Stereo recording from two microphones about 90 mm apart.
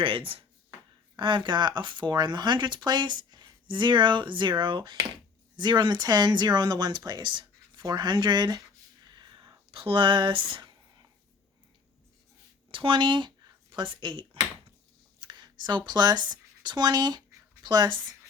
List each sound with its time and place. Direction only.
0.0 s speech: 80° right
1.1 s speech: 65° right (ahead or behind)
7.9 s a sound: 55° right (ahead or behind)
12.7 s speech: 70° right (ahead or behind)
15.2 s a sound: 55° right (ahead or behind)
15.9 s speech: 50° right (ahead or behind)